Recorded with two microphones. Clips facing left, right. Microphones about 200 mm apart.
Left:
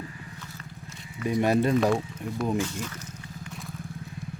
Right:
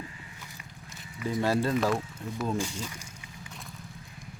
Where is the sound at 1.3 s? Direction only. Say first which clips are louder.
Left 4 dB; 20° left (ahead or behind).